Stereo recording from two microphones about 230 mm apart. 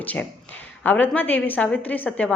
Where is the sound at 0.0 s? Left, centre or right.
Centre.